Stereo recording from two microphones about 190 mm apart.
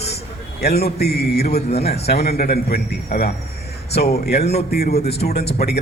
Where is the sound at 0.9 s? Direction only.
60° left (ahead or behind).